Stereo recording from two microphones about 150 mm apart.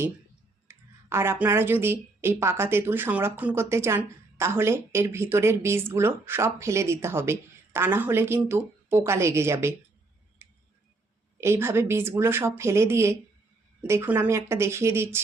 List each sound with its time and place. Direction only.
0.7 s a woman's voice: 15° right (ahead or behind)
11.3 s a woman's voice: 15° right (ahead or behind)